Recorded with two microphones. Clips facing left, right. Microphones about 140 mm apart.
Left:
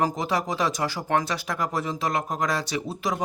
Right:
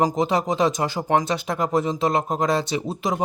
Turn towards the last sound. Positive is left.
turn(degrees=-20)  # may be behind; listen again after turning